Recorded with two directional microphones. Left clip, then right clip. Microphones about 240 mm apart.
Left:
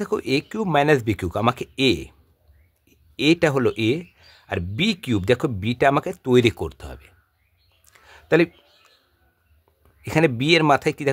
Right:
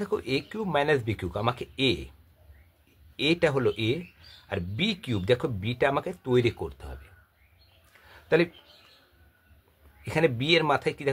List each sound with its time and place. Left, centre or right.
0.0 s speech: left
3.2 s speech: left
8.1 s a sound: left
10.0 s speech: left